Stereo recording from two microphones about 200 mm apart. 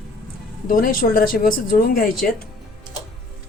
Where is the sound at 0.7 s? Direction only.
45° left (ahead or behind).